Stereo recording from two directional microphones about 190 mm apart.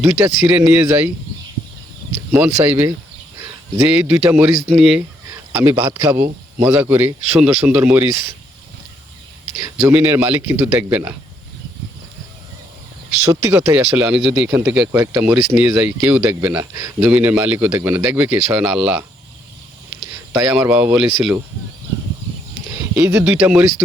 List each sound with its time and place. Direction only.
0.0 s speech: 10° right (ahead or behind)
2.3 s speech: 10° right (ahead or behind)
5.5 s speech: 15° right (ahead or behind)
9.8 s speech: 10° right (ahead or behind)
13.3 s speech: 15° right (ahead or behind)
20.4 s speech: 5° right (ahead or behind)
23.0 s speech: 15° right (ahead or behind)
23.2 s speech: 5° right (ahead or behind)